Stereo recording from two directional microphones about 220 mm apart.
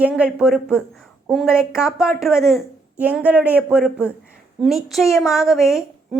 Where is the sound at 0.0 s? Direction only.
5° right (ahead or behind).